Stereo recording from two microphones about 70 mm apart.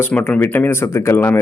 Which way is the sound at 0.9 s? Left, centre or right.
Left.